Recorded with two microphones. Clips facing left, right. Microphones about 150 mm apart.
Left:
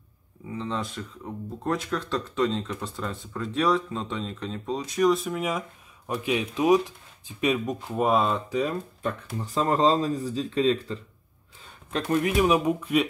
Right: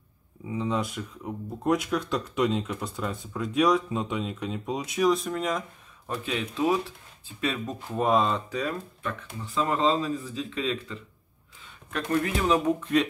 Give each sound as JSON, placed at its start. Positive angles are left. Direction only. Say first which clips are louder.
{"t": 0.5, "sound": "speech", "louder": "right 3 dB", "side_deg": -10}
{"t": 9.0, "sound": "speech", "louder": "left 4 dB", "side_deg": 40}
{"t": 11.9, "sound": "speech", "louder": "left 2 dB", "side_deg": 15}